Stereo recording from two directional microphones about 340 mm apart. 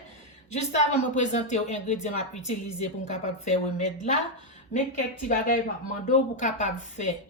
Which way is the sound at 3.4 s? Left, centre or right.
Centre.